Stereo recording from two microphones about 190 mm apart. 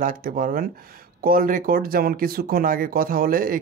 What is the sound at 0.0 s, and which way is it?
Speech, 45° right (ahead or behind).